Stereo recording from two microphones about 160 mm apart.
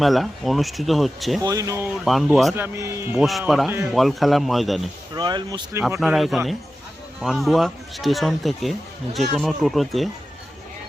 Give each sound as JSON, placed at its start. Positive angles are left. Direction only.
{"t": 0.0, "sound": "speech", "side_deg": 0}
{"t": 1.4, "sound": "speech", "side_deg": -20}
{"t": 2.0, "sound": "speech", "side_deg": 0}
{"t": 2.6, "sound": "a man's voice", "side_deg": -15}
{"t": 3.2, "sound": "speech", "side_deg": 0}
{"t": 5.1, "sound": "speech", "side_deg": -25}
{"t": 6.0, "sound": "speech", "side_deg": 0}